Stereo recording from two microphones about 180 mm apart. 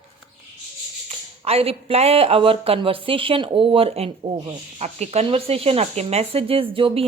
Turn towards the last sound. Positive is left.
turn(degrees=-30)  # may be behind; listen again after turning